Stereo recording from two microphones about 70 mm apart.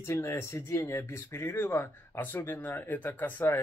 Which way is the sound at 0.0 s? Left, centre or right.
Left.